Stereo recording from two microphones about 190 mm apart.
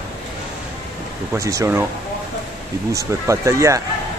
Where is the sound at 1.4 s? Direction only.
15° right (ahead or behind).